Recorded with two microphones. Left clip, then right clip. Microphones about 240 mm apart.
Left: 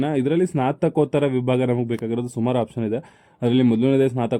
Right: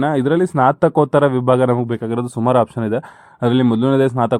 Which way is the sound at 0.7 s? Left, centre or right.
Centre.